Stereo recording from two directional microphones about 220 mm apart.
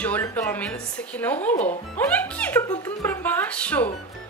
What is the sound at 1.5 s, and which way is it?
Speech, 35° left (ahead or behind).